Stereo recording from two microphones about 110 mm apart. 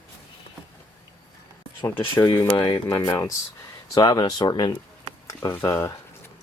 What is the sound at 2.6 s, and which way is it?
Speech, 30° left (ahead or behind).